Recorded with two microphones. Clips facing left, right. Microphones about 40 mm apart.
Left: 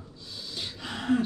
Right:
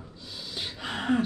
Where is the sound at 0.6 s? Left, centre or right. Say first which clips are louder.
Right 3 dB; right.